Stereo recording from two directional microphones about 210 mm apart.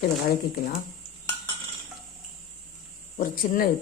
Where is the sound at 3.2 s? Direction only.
45° left (ahead or behind).